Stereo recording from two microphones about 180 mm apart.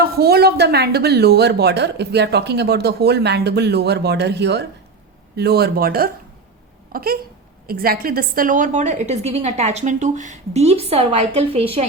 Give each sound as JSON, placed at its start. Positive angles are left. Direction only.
{"t": 0.0, "sound": "a woman's voice", "side_deg": -60}